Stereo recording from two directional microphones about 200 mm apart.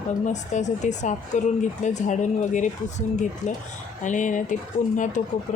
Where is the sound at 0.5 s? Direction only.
35° left (ahead or behind).